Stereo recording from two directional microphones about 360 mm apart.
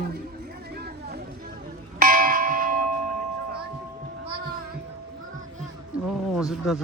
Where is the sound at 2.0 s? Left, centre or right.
Right.